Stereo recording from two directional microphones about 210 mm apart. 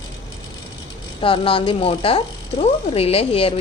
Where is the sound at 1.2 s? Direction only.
25° left (ahead or behind).